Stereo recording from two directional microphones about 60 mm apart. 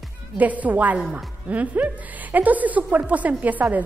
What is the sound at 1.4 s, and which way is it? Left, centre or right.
A woman's voice, right.